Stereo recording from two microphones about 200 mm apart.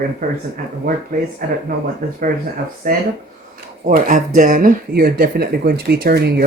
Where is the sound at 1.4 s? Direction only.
45° right (ahead or behind).